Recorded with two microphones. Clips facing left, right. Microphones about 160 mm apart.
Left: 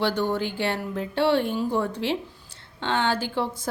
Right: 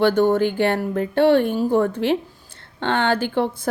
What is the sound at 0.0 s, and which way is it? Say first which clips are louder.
A woman's voice: right 8 dB; 50° right (ahead or behind).